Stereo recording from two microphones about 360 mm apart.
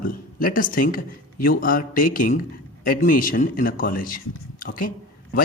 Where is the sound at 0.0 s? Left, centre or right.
Left.